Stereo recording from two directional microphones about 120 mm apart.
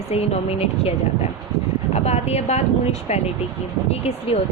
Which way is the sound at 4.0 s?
55° left (ahead or behind).